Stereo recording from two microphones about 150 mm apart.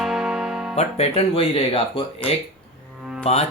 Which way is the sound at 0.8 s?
45° left (ahead or behind).